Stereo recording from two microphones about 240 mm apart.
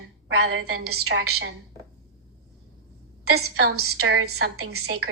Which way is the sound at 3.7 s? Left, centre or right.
Right.